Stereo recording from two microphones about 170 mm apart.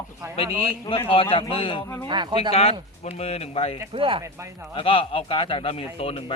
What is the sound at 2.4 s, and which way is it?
Speech, 35° left (ahead or behind).